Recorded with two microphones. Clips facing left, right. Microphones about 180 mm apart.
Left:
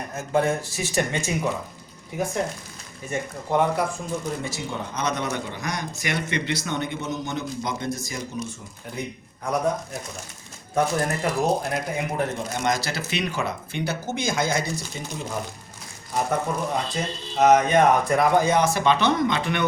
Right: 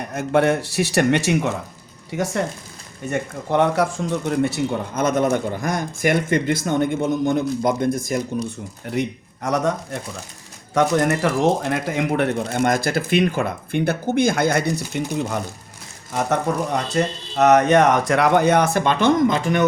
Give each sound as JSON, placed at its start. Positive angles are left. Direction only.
{"t": 0.2, "sound": "speech", "side_deg": -70}
{"t": 3.1, "sound": "speech", "side_deg": -70}
{"t": 8.4, "sound": "speech", "side_deg": -85}
{"t": 16.1, "sound": "speech", "side_deg": -75}